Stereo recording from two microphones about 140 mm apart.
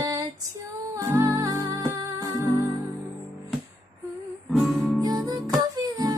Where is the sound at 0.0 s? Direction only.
25° right (ahead or behind).